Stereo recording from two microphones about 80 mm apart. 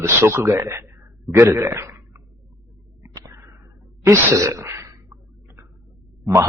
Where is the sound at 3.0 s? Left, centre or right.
Right.